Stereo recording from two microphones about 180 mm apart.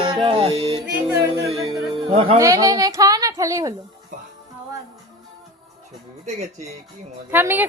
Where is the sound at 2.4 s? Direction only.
20° right (ahead or behind).